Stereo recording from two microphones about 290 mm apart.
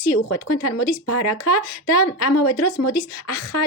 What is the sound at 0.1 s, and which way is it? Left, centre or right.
Speech, left.